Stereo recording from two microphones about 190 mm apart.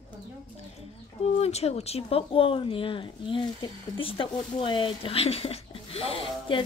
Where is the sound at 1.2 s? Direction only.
35° left (ahead or behind).